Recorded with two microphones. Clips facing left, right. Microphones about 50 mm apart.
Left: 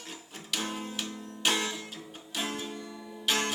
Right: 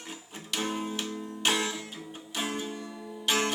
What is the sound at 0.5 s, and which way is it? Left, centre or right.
Music, centre.